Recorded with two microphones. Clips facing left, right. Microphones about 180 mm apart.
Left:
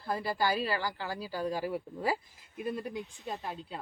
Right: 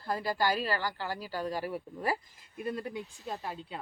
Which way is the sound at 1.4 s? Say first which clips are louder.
Left 3 dB; 10° left (ahead or behind).